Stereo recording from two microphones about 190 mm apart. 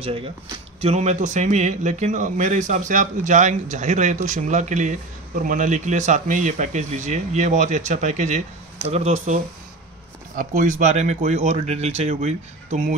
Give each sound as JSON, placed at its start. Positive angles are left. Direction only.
{"t": 0.0, "sound": "a man's voice", "side_deg": -30}